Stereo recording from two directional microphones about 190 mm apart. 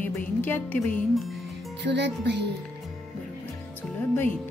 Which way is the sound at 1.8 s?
65° right (ahead or behind).